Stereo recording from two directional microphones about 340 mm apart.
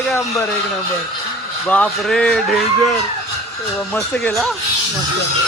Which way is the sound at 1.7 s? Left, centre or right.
Centre.